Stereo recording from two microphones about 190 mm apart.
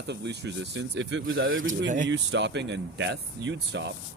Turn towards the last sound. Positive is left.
turn(degrees=-65)  # may be behind; listen again after turning